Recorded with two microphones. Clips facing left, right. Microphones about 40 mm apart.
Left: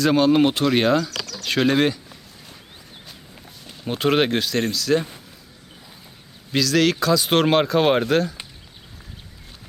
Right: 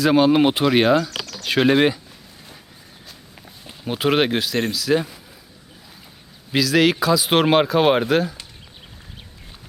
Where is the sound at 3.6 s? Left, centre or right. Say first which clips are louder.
Even; centre.